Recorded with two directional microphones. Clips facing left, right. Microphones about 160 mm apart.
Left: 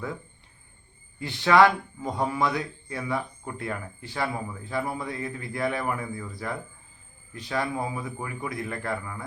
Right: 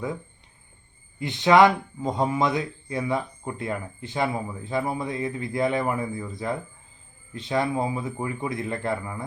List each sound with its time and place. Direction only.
1.2 s speech: 20° right (ahead or behind)